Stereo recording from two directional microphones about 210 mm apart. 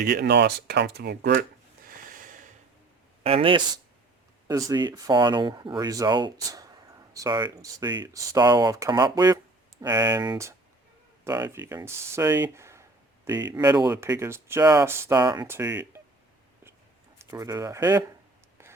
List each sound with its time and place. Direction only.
0.0 s speech: 50° right (ahead or behind)
1.9 s a sound: 40° right (ahead or behind)
3.2 s speech: 25° right (ahead or behind)
17.2 s speech: 15° right (ahead or behind)